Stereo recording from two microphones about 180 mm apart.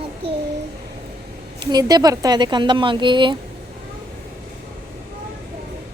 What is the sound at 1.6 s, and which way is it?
Speech, 20° right (ahead or behind).